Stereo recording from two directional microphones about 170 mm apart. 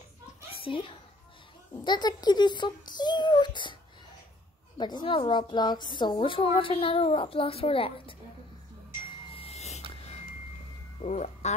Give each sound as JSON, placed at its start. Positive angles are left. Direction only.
{"t": 0.7, "sound": "a child's voice", "side_deg": 30}
{"t": 4.7, "sound": "a woman's voice", "side_deg": 25}
{"t": 9.3, "sound": "snort", "side_deg": 35}
{"t": 11.0, "sound": "speech", "side_deg": 45}